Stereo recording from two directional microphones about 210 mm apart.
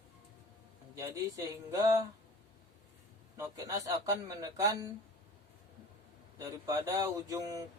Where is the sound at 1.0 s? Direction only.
15° right (ahead or behind).